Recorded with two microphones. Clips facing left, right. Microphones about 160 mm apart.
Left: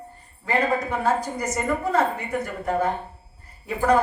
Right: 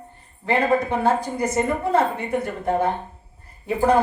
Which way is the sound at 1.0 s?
25° right (ahead or behind).